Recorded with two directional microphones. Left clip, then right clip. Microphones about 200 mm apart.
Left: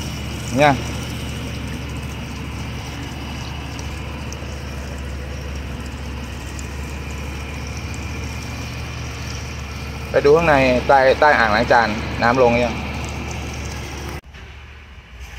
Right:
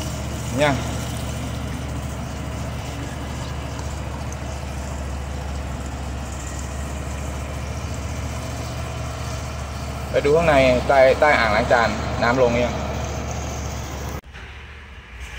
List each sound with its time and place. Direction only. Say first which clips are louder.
10.1 s speech: left 3 dB; 35° left (ahead or behind)